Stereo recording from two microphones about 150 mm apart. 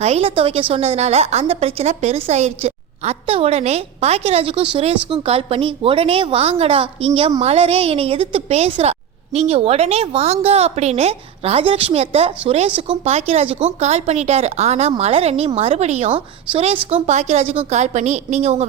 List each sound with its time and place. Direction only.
0.0 s a woman's voice: 45° right (ahead or behind)